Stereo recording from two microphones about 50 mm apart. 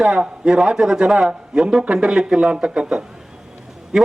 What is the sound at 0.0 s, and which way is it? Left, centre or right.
A man's voice, centre.